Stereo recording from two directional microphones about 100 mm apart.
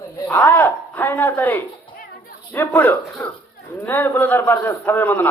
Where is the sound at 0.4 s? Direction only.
20° left (ahead or behind).